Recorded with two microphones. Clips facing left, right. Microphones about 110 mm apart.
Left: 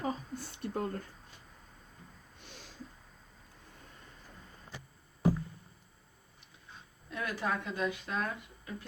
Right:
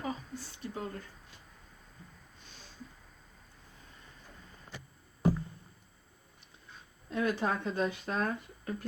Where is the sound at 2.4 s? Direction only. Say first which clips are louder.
Left 4 dB; 75° left (ahead or behind).